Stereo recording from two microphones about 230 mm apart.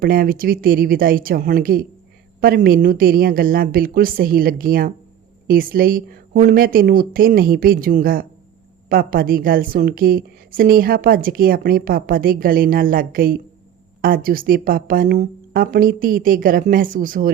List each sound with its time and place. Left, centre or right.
0.0 s a woman's voice: right